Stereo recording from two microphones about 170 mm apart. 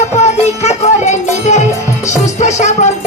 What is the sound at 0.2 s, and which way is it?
Music, 40° left (ahead or behind).